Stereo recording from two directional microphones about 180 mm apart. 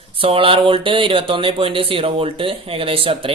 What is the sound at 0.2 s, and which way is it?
Speech, 30° right (ahead or behind).